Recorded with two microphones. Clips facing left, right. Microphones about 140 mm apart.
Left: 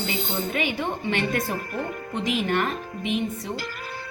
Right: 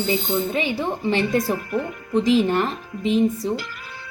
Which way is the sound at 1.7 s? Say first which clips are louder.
Right 6 dB; 45° left (ahead or behind).